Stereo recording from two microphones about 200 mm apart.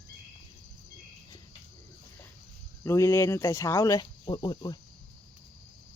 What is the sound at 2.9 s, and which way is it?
Speech, 15° left (ahead or behind).